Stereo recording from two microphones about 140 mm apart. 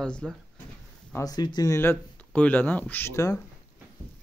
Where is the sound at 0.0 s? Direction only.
5° left (ahead or behind).